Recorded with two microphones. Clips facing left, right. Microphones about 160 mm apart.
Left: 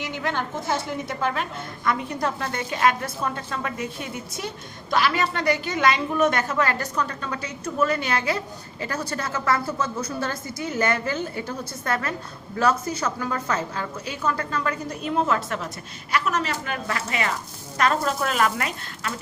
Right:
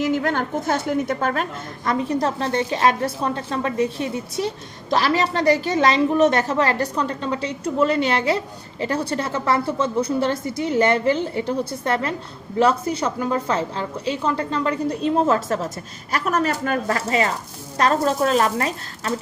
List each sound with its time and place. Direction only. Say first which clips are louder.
0.1 s a woman's voice: right 6 dB; 45° right (ahead or behind)